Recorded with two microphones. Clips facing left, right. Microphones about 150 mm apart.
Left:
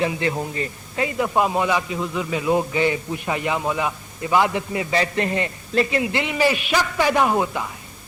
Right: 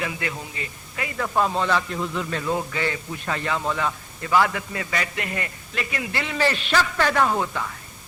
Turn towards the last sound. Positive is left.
turn(degrees=15)  # may be behind; listen again after turning